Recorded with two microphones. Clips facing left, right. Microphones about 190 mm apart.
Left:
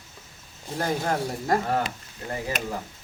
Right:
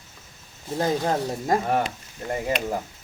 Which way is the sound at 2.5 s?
45° left (ahead or behind).